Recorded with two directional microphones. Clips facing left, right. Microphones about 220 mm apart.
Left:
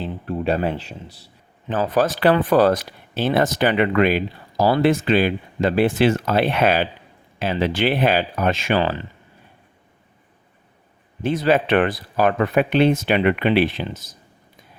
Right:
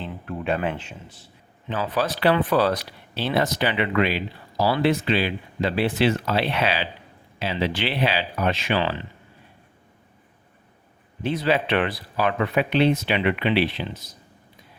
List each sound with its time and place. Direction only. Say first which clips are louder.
0.0 s a man's voice: left 6 dB; 35° left (ahead or behind)
11.2 s a man's voice: left 4 dB; 45° left (ahead or behind)